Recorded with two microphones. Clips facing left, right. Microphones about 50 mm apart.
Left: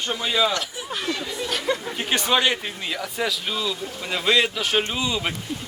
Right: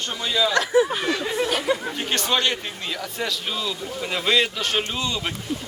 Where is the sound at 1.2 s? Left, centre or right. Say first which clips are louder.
Right 6 dB; right.